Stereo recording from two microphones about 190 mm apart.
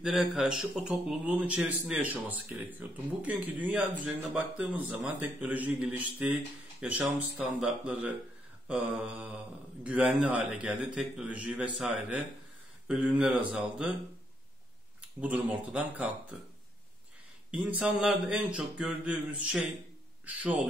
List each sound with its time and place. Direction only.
0.0 s a man's voice: centre (ahead or behind)
15.0 s a man's voice: 5° right (ahead or behind)
17.5 s a man's voice: 10° right (ahead or behind)